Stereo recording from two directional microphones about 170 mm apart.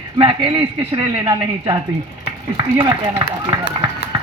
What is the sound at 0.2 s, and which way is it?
Speech, 30° right (ahead or behind).